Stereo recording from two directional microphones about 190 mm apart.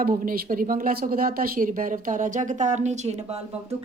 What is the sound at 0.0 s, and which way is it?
A woman's voice, 50° right (ahead or behind).